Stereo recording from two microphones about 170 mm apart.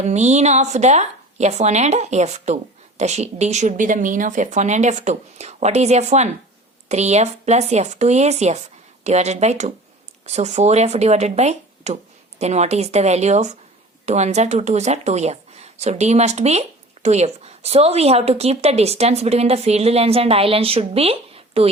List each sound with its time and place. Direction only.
0.0 s speech: 40° right (ahead or behind)